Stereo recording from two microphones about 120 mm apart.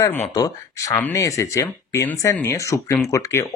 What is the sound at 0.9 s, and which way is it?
Speech, 20° left (ahead or behind).